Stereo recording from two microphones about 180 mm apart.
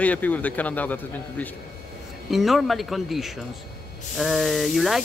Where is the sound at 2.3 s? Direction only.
Centre (ahead or behind).